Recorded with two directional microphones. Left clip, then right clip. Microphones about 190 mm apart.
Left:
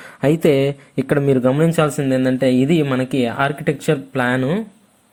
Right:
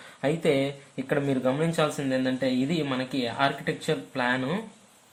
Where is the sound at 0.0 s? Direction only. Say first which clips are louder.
Left 10 dB; 50° left (ahead or behind); by 4.6 s 35° left (ahead or behind).